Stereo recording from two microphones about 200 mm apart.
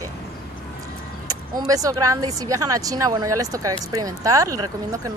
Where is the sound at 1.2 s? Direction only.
20° right (ahead or behind).